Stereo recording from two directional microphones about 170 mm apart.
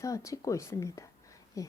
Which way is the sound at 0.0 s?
20° left (ahead or behind).